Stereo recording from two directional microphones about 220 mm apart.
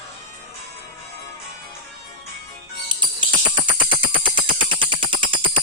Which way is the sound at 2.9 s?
20° right (ahead or behind).